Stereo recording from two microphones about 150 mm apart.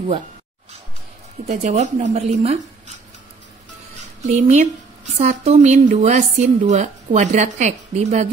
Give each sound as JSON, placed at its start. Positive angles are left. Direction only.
{"t": 1.5, "sound": "speech", "side_deg": -50}
{"t": 4.2, "sound": "speech", "side_deg": -50}